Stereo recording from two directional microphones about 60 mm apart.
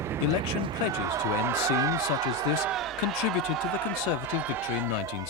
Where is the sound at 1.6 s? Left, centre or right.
Right.